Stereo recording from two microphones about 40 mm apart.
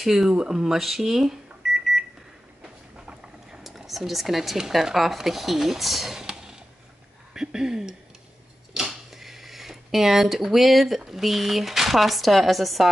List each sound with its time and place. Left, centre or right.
0.0 s speech: centre
2.6 s vehicle: right
3.6 s speech: centre
6.1 s a sound: centre
11.0 s speech: centre